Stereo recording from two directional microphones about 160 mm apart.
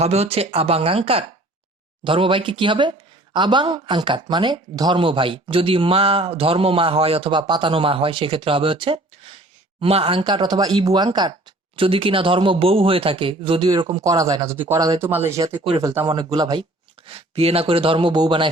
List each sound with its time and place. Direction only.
0.0 s speech: 40° right (ahead or behind)
17.1 s speech: 40° right (ahead or behind)